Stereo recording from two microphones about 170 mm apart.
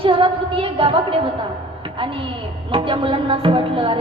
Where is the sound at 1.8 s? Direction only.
30° right (ahead or behind).